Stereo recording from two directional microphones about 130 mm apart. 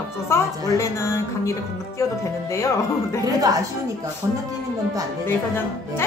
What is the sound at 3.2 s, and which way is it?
Speech, 25° right (ahead or behind).